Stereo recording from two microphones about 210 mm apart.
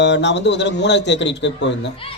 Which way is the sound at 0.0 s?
55° left (ahead or behind).